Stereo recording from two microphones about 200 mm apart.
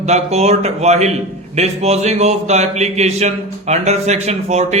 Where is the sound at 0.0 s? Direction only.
35° right (ahead or behind).